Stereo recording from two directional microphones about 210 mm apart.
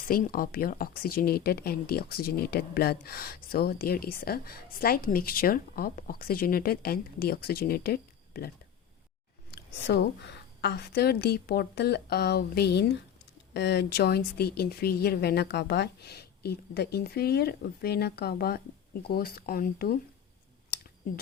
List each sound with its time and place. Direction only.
0.0 s speech: 45° left (ahead or behind)
9.5 s a sound: 55° left (ahead or behind)
10.6 s speech: 50° left (ahead or behind)